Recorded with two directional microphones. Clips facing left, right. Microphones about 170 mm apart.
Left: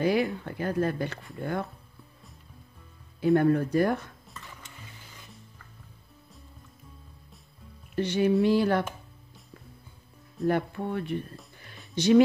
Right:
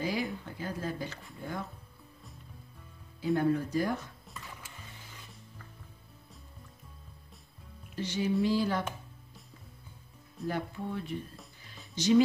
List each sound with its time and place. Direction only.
0.0 s speech: 65° left (ahead or behind)
3.3 s speech: 60° left (ahead or behind)
7.9 s speech: 60° left (ahead or behind)
10.5 s speech: 60° left (ahead or behind)